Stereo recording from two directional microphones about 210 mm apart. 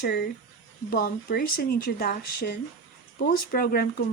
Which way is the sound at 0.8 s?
45° left (ahead or behind).